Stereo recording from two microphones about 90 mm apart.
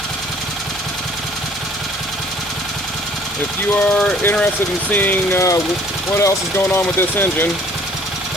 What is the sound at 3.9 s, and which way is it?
Speech, 15° left (ahead or behind).